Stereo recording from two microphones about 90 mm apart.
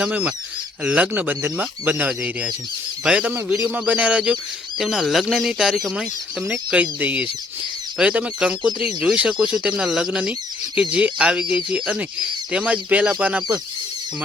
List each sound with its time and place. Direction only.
0.0 s speech: 15° right (ahead or behind)
4.8 s speech: centre (ahead or behind)